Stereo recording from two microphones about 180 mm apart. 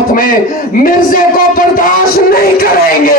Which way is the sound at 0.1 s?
50° left (ahead or behind).